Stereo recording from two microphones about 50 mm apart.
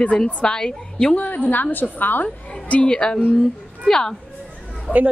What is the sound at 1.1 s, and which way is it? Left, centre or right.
A woman's voice, left.